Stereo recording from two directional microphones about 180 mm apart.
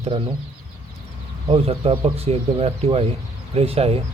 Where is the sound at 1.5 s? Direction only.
35° right (ahead or behind).